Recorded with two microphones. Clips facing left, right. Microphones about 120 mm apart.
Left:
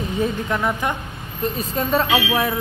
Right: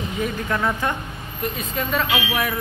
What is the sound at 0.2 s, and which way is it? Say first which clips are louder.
Speech: left 1 dB; 15° left (ahead or behind).